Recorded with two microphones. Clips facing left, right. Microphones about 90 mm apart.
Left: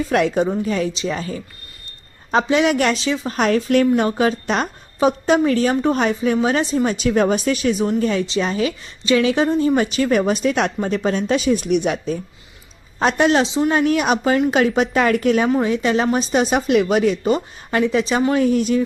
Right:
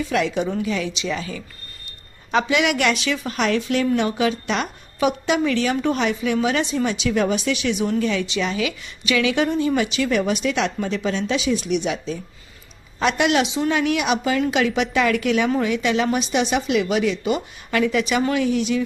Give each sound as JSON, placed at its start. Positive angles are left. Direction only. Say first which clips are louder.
{"t": 0.1, "sound": "a woman's voice", "louder": "left 5 dB", "side_deg": 45}
{"t": 13.0, "sound": "speech", "louder": "left 3 dB", "side_deg": 40}
{"t": 18.3, "sound": "a woman's voice", "louder": "left 4 dB", "side_deg": 45}